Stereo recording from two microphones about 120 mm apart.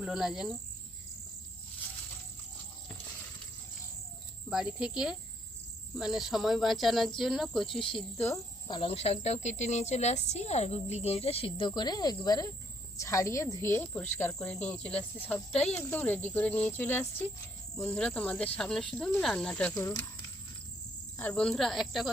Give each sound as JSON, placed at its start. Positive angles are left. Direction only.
{"t": 0.0, "sound": "speech", "side_deg": -5}
{"t": 4.4, "sound": "speech", "side_deg": -5}
{"t": 8.2, "sound": "speech", "side_deg": 25}
{"t": 8.9, "sound": "a woman's voice", "side_deg": 60}
{"t": 19.7, "sound": "a woman's voice", "side_deg": 25}
{"t": 21.2, "sound": "speech", "side_deg": 10}